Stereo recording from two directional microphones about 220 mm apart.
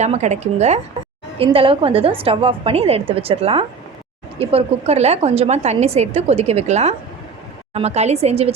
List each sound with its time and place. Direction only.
0.0 s a woman's voice: 30° right (ahead or behind)